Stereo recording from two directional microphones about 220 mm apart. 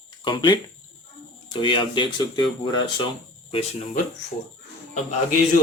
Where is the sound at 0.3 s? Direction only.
20° left (ahead or behind).